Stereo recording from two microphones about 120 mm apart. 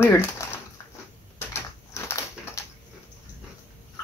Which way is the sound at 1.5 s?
20° left (ahead or behind).